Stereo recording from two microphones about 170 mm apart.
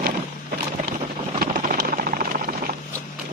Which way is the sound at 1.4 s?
55° right (ahead or behind).